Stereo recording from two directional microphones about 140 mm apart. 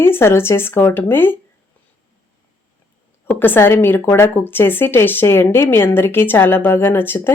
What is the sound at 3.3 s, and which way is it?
Speech, 15° left (ahead or behind).